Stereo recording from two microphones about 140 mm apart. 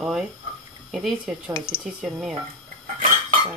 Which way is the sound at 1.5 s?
40° right (ahead or behind).